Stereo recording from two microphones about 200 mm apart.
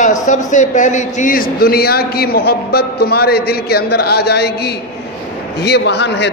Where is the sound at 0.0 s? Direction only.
40° left (ahead or behind).